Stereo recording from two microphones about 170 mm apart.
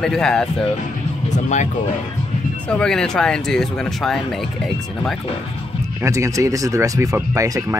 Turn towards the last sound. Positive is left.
turn(degrees=-20)  # may be behind; listen again after turning